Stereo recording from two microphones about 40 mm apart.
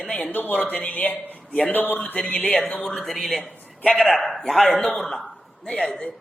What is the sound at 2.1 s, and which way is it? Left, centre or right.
Speech, left.